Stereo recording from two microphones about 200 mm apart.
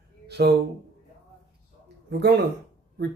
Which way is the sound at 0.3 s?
55° right (ahead or behind).